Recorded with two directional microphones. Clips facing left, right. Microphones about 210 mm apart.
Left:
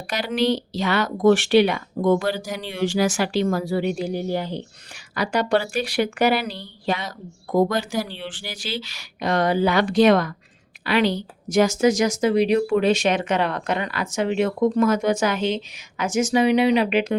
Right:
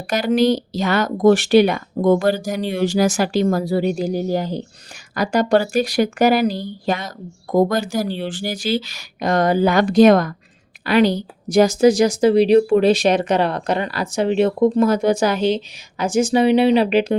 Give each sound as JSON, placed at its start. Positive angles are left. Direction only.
{"t": 0.1, "sound": "speech", "side_deg": -45}